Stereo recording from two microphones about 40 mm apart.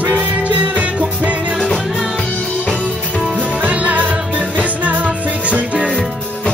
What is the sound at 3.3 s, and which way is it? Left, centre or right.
Music, right.